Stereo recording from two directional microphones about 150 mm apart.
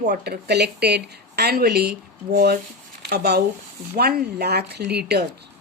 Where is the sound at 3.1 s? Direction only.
90° right.